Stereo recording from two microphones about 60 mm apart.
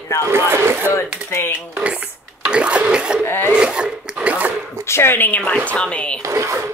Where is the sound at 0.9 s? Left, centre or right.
Left.